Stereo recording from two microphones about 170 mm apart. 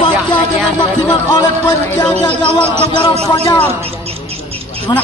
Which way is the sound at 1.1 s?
25° left (ahead or behind).